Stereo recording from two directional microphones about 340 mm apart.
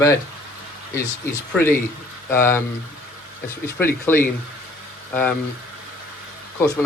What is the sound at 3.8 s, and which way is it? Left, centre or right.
Speech, centre.